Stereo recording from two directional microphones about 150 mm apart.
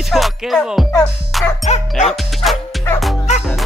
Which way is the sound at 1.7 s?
50° left (ahead or behind).